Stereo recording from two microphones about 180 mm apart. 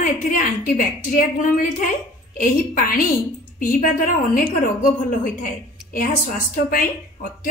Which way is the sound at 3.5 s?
50° left (ahead or behind).